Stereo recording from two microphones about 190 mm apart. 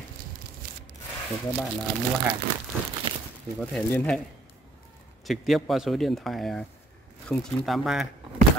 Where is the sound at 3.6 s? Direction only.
5° left (ahead or behind).